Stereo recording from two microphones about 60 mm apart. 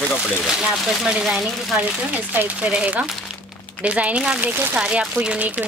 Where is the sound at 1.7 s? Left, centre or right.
Right.